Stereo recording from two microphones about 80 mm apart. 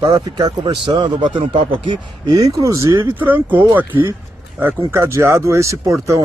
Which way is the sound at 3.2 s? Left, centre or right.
Right.